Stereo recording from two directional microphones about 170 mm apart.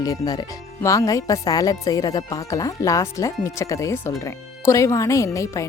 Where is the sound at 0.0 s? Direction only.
20° left (ahead or behind).